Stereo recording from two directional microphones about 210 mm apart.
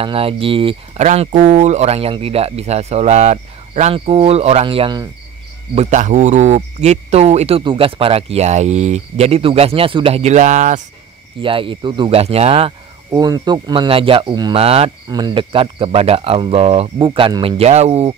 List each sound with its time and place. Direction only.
0.0 s speech: 25° right (ahead or behind)
5.8 s speech: 35° right (ahead or behind)
11.4 s speech: 25° right (ahead or behind)